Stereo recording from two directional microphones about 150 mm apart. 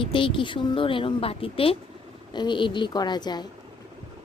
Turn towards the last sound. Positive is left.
turn(degrees=30)  # may be behind; listen again after turning